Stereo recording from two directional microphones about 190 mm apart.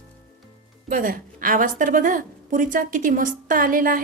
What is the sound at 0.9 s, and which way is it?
A woman's voice, 45° right (ahead or behind).